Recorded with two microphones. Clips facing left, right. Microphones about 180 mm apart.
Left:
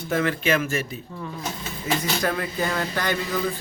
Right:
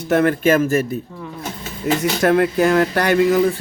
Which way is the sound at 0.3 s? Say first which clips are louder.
Right 7 dB; 45° right (ahead or behind).